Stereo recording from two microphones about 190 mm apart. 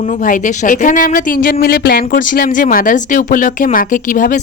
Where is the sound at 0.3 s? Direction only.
40° left (ahead or behind).